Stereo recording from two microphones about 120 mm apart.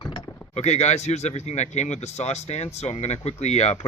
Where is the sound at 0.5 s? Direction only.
70° left (ahead or behind).